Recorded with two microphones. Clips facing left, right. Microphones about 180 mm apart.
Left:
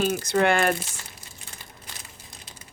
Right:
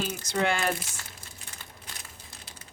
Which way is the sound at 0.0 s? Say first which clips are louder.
Left 6 dB; 55° left (ahead or behind).